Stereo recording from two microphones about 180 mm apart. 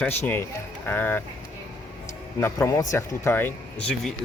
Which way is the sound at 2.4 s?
15° left (ahead or behind).